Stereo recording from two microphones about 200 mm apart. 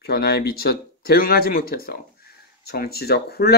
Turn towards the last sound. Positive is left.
turn(degrees=50)  # may be behind; listen again after turning